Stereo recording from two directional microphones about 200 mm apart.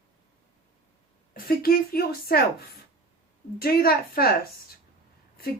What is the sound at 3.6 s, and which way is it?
Speech, 50° left (ahead or behind).